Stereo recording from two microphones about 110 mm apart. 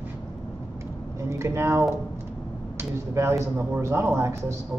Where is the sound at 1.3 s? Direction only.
25° right (ahead or behind).